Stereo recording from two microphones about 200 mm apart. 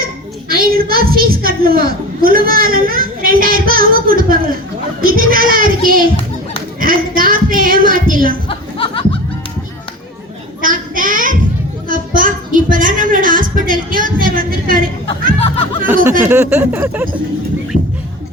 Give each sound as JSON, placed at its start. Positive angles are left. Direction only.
{"t": 0.0, "sound": "a child's voice", "side_deg": -50}
{"t": 8.4, "sound": "a sound", "side_deg": 25}
{"t": 10.6, "sound": "child singing", "side_deg": -45}
{"t": 11.9, "sound": "a child's voice", "side_deg": -45}
{"t": 15.4, "sound": "speech", "side_deg": 30}
{"t": 16.2, "sound": "speech", "side_deg": -10}